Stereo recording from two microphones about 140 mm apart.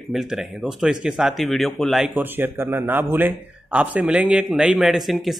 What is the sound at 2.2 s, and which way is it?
Speech, 15° right (ahead or behind).